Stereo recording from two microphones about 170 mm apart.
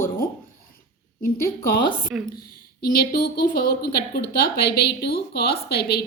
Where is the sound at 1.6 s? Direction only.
60° left (ahead or behind).